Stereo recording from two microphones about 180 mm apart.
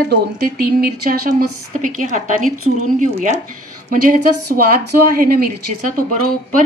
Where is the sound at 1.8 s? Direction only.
45° right (ahead or behind).